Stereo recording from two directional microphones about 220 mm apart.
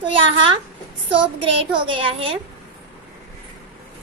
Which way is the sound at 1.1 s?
20° right (ahead or behind).